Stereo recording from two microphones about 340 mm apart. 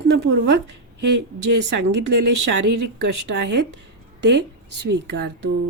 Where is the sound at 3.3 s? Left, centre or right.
Right.